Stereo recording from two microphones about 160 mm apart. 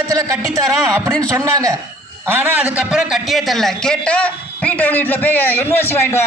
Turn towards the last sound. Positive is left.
turn(degrees=15)  # may be behind; listen again after turning